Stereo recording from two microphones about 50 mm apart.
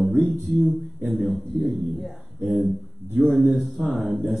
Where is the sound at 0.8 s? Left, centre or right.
Centre.